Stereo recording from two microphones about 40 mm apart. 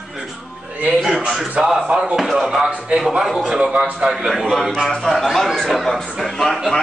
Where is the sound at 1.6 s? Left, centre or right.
Centre.